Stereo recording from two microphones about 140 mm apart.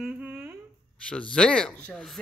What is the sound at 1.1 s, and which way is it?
Speech, 5° left (ahead or behind).